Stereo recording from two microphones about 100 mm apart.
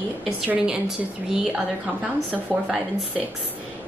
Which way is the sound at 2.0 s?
10° right (ahead or behind).